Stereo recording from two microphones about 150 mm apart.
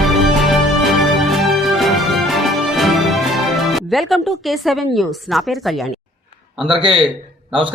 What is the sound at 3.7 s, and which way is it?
Speech, centre (ahead or behind).